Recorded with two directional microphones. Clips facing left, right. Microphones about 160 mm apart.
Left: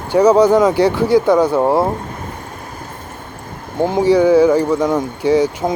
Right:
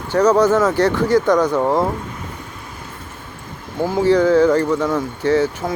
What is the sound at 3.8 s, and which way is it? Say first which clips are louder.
Speech: left 2 dB; 20° left (ahead or behind).